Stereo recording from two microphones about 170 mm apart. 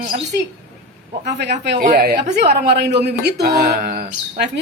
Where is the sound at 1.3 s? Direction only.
80° right.